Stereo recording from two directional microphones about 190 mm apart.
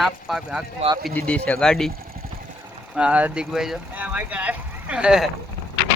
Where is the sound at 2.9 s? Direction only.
5° right (ahead or behind).